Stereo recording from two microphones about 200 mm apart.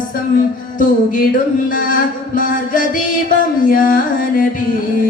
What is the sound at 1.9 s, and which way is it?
Music, 45° left (ahead or behind).